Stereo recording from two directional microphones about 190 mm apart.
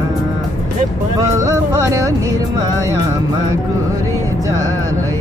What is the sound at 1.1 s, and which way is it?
Music, 20° right (ahead or behind).